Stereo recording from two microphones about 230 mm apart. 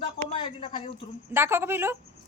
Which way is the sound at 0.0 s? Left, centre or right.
Left.